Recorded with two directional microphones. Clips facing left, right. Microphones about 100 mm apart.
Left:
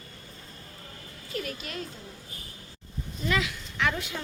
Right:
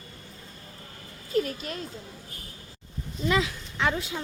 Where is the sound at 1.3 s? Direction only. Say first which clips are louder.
Right 7 dB; 35° right (ahead or behind).